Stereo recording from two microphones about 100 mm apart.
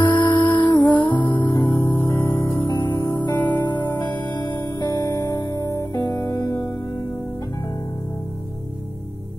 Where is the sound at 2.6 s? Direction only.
45° left (ahead or behind).